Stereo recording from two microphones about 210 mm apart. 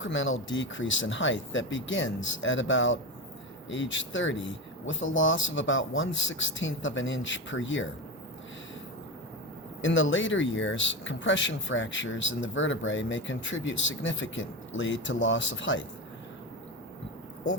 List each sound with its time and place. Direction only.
0.0 s speech: 65° left (ahead or behind)
9.8 s speech: 65° left (ahead or behind)